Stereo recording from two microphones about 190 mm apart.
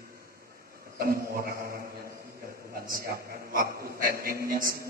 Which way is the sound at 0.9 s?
50° right (ahead or behind).